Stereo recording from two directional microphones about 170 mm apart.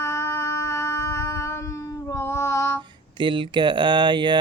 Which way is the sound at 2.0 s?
15° left (ahead or behind).